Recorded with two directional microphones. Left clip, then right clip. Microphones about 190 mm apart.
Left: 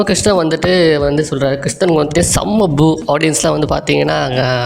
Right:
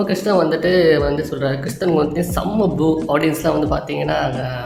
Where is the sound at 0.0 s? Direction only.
45° left (ahead or behind).